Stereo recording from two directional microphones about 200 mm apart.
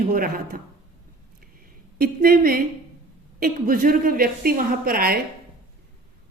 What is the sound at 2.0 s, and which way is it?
A woman's voice, 50° right (ahead or behind).